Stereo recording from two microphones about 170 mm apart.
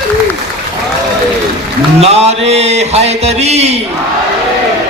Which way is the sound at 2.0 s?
40° right (ahead or behind).